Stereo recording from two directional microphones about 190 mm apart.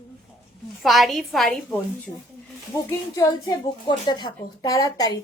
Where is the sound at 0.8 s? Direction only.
Centre (ahead or behind).